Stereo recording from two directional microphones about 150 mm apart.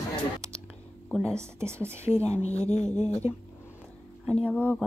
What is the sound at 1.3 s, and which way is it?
Speech, 20° right (ahead or behind).